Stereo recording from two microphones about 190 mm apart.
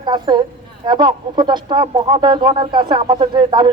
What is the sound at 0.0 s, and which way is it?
Speech, 25° right (ahead or behind).